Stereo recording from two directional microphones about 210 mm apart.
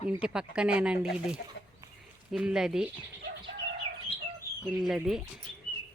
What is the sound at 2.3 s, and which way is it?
Speech, 5° right (ahead or behind).